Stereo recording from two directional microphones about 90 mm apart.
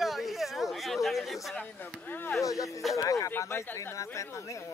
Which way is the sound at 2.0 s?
20° left (ahead or behind).